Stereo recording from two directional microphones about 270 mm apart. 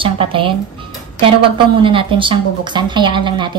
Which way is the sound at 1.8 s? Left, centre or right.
Centre.